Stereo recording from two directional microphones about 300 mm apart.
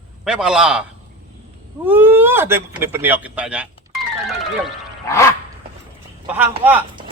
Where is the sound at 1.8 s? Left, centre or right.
Centre.